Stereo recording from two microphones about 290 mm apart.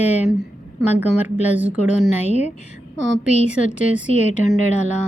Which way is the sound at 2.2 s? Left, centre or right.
Left.